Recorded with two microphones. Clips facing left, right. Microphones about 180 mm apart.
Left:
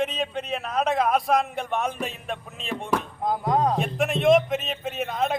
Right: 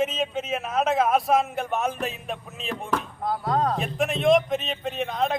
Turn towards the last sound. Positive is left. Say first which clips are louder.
# even
turn(degrees=0)  # may be behind; listen again after turning